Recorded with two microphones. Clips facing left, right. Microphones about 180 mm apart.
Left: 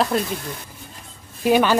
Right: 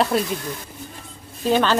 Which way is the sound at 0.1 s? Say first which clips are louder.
Right 1 dB; centre (ahead or behind).